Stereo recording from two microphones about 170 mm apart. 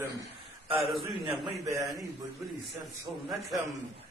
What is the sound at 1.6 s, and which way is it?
Speech, 20° right (ahead or behind).